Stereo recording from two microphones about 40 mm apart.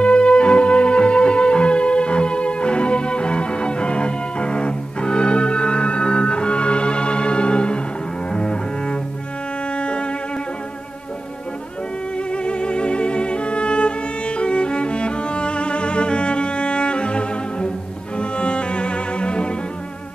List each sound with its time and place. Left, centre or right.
0.0 s music: left
8.3 s double bass: left
9.8 s music: left
12.3 s music: left